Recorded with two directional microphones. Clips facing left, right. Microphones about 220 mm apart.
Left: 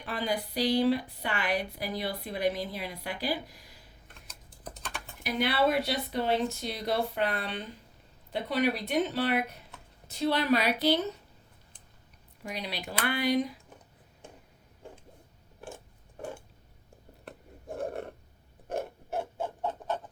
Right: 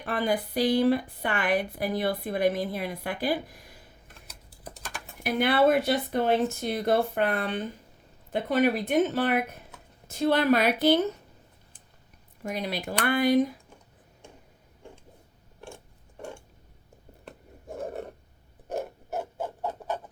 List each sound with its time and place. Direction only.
0.0 s a woman's voice: 50° right (ahead or behind)
4.3 s typing: 10° right (ahead or behind)
5.2 s a woman's voice: 50° right (ahead or behind)
12.4 s a woman's voice: 45° right (ahead or behind)
17.2 s a sound: centre (ahead or behind)
18.7 s mechanisms: 5° right (ahead or behind)